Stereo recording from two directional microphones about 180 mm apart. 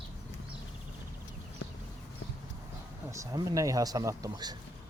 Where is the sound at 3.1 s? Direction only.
20° right (ahead or behind).